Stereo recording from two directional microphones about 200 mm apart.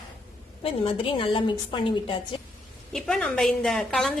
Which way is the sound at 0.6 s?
30° left (ahead or behind).